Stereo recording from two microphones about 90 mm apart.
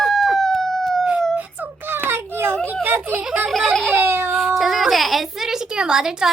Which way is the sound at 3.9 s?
25° right (ahead or behind).